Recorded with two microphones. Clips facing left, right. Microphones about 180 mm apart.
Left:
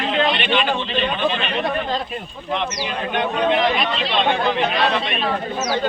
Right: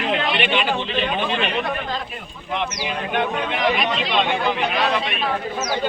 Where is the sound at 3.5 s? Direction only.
10° right (ahead or behind).